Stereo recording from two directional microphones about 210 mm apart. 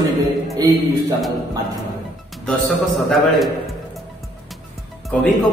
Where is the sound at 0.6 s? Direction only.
20° right (ahead or behind).